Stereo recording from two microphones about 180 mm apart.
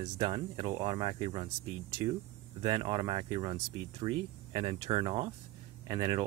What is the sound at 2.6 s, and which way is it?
Speech, 25° right (ahead or behind).